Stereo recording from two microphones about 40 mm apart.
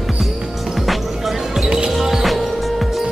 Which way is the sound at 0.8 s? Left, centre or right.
Centre.